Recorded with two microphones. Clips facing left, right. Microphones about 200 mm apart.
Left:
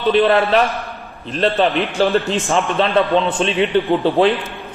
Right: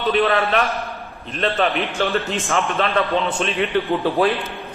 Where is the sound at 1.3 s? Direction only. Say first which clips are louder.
Left 4 dB; 30° left (ahead or behind).